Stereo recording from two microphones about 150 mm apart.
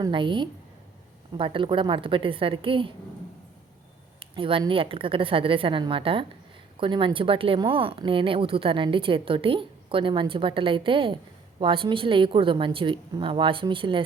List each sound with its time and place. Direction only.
0.0 s speech: 35° right (ahead or behind)
4.2 s a sound: 35° right (ahead or behind)
4.7 s speech: 35° right (ahead or behind)